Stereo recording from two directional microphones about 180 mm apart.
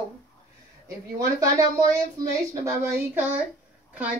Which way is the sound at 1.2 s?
20° right (ahead or behind).